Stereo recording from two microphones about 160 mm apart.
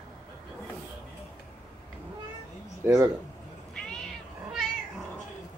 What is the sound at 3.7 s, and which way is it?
Cat, 5° left (ahead or behind).